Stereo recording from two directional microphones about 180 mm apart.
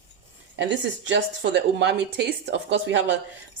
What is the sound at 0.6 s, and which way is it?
A woman's voice, 85° right.